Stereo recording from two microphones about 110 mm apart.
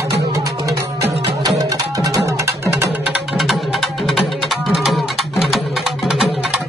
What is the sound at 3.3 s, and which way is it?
Music, centre (ahead or behind).